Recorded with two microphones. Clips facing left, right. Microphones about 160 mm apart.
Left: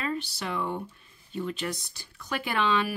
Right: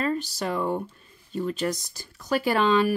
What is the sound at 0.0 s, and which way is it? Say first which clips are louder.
Speech: right 5 dB; 45° right (ahead or behind).